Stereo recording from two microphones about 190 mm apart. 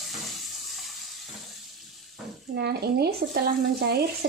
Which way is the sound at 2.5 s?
60° right (ahead or behind).